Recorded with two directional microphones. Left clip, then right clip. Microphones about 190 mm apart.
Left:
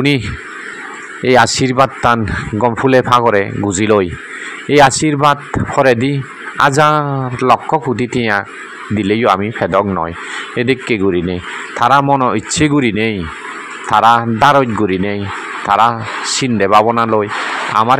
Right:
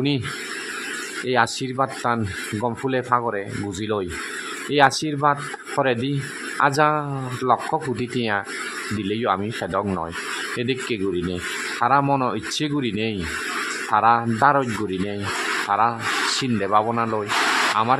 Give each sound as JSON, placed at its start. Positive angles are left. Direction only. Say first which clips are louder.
{"t": 1.2, "sound": "speech", "louder": "left 11 dB", "side_deg": 35}